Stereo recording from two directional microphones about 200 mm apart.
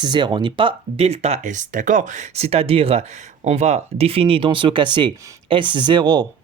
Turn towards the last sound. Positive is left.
turn(degrees=-20)  # may be behind; listen again after turning